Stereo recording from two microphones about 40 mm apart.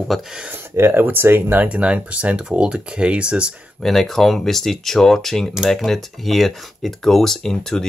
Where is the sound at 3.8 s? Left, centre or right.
Centre.